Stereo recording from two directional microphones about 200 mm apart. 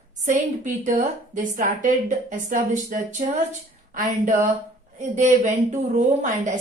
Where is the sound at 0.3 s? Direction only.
40° right (ahead or behind).